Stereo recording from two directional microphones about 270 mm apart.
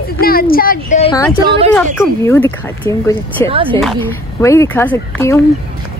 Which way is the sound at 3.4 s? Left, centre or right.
Centre.